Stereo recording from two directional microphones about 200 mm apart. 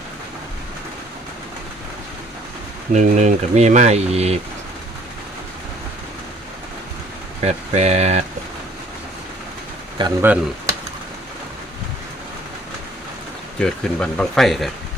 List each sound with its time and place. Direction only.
2.9 s speech: 35° right (ahead or behind)
7.4 s speech: 30° right (ahead or behind)
10.0 s speech: 10° right (ahead or behind)
13.6 s speech: 5° left (ahead or behind)